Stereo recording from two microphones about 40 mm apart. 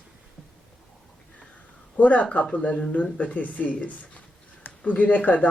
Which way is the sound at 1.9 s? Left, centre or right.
Left.